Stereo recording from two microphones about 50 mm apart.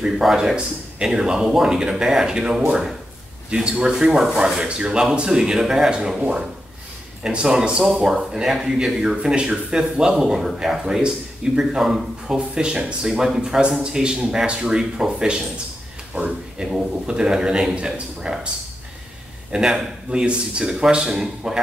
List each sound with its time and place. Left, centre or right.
0.0 s speech: centre
7.2 s speech: centre
10.8 s speech: centre
19.5 s speech: centre